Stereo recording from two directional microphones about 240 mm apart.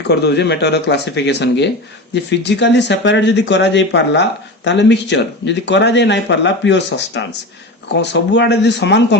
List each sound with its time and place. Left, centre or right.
0.1 s speech: left